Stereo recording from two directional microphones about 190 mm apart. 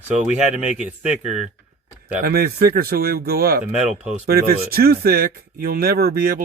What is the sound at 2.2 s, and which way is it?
Speech, 55° right (ahead or behind).